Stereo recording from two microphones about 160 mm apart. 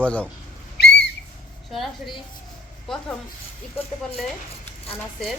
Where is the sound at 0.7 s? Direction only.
90° left.